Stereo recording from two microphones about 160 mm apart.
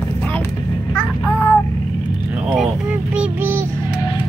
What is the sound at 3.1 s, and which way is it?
Child singing, 10° right (ahead or behind).